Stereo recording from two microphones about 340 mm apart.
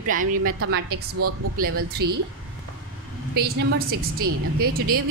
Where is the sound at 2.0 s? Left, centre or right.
Right.